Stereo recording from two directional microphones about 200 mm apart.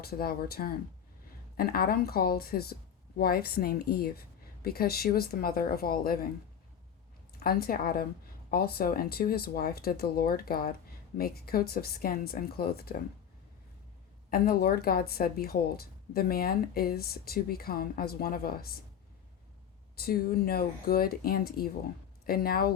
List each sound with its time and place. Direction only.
0.0 s speech: 50° left (ahead or behind)
7.3 s speech: 50° left (ahead or behind)
14.3 s speech: 50° left (ahead or behind)
20.0 s speech: 50° left (ahead or behind)